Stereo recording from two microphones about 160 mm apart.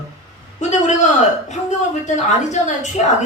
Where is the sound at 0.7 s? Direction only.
50° left (ahead or behind).